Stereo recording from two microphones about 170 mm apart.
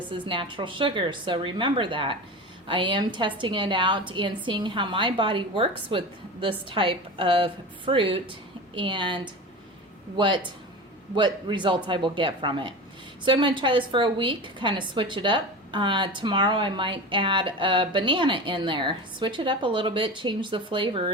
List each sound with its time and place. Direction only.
0.1 s a woman's voice: 30° right (ahead or behind)